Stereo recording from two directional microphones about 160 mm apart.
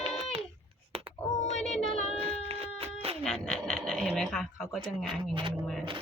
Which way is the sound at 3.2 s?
5° left (ahead or behind).